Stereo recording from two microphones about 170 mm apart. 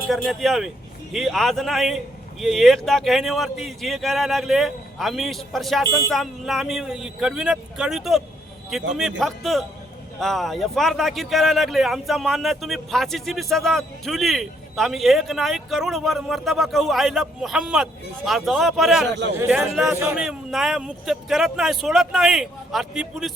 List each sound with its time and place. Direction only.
0.1 s a man's voice: centre (ahead or behind)
19.0 s a man's voice: 90° right
19.4 s a man's voice: 5° right (ahead or behind)
20.2 s a man's voice: 5° right (ahead or behind)